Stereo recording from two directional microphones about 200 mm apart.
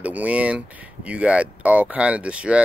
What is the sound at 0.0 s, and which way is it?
Speech, 5° right (ahead or behind).